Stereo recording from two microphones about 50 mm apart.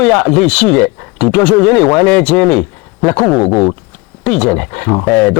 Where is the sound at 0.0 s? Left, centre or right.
Centre.